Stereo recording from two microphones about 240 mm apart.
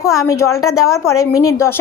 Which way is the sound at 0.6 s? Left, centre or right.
Left.